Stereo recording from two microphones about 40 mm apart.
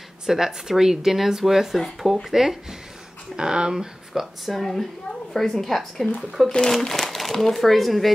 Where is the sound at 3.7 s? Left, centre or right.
Centre.